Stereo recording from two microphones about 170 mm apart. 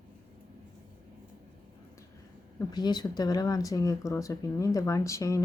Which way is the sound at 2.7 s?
25° left (ahead or behind).